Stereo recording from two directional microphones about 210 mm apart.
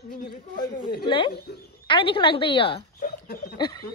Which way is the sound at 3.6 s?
20° left (ahead or behind).